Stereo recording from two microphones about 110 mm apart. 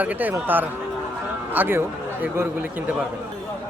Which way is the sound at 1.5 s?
20° right (ahead or behind).